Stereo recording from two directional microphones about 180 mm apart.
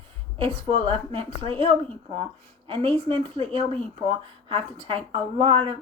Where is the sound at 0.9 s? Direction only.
30° right (ahead or behind).